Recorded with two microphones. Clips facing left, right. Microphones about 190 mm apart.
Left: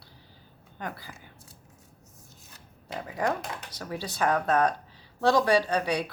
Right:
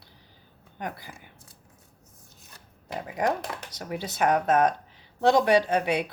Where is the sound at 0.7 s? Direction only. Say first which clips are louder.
Right 2 dB; 20° right (ahead or behind).